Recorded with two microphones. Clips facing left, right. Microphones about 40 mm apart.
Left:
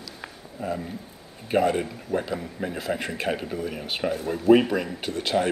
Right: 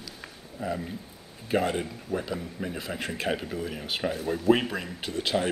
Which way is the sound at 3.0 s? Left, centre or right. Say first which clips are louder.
Left 2 dB; left.